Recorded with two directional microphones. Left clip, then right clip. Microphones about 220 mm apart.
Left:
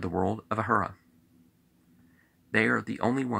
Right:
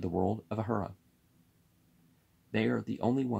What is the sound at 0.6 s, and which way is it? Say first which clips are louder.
Speech: left 10 dB; 15° right (ahead or behind).